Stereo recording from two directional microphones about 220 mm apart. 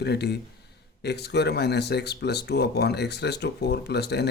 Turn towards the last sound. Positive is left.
turn(degrees=50)  # may be behind; listen again after turning